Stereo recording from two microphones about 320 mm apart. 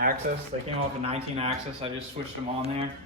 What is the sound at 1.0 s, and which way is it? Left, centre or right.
Speech, centre.